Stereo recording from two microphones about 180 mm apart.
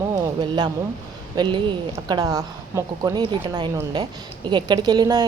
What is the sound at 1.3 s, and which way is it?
Speech, 25° right (ahead or behind).